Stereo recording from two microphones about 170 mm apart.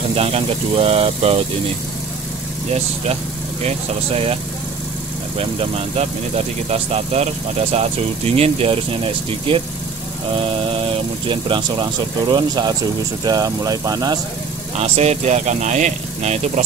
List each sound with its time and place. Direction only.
0.1 s speech: 35° right (ahead or behind)
3.6 s speech: 35° right (ahead or behind)
5.4 s speech: 35° right (ahead or behind)
11.2 s speech: 30° right (ahead or behind)
14.8 s speech: 40° right (ahead or behind)